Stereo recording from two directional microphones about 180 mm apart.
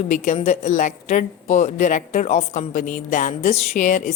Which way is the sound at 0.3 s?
40° left (ahead or behind).